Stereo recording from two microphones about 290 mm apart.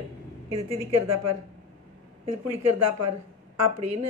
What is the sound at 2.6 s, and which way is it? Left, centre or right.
Speech, right.